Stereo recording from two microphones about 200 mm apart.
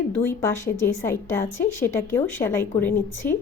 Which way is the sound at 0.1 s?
10° left (ahead or behind).